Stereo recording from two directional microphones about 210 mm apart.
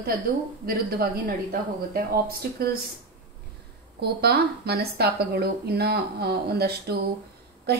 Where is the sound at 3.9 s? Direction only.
50° right (ahead or behind).